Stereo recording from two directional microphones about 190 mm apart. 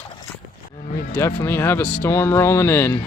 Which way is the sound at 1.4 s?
10° left (ahead or behind).